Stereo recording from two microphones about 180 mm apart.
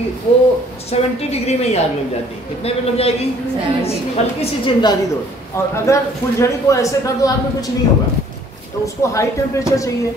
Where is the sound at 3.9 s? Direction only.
30° left (ahead or behind).